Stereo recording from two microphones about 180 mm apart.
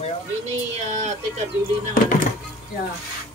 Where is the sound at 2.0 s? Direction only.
50° left (ahead or behind).